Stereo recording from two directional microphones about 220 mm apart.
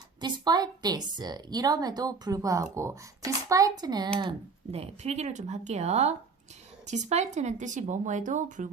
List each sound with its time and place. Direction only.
0.2 s a woman's voice: 20° right (ahead or behind); by 8.7 s 35° right (ahead or behind)